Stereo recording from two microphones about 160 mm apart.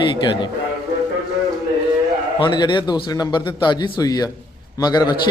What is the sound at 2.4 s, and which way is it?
A man's voice, 30° left (ahead or behind).